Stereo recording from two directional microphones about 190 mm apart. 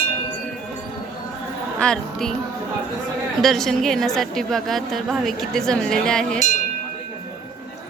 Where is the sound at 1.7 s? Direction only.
5° left (ahead or behind).